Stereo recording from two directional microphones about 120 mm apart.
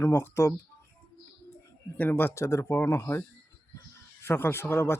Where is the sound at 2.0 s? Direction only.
15° left (ahead or behind).